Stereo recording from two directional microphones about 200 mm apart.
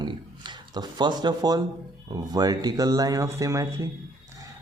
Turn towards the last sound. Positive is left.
turn(degrees=-15)  # may be behind; listen again after turning